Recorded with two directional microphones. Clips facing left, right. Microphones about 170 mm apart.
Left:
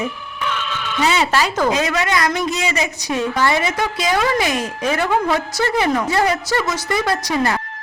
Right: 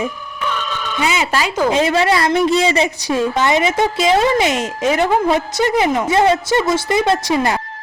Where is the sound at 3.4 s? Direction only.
20° right (ahead or behind).